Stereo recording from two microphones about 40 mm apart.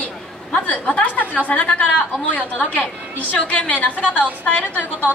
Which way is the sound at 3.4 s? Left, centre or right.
Left.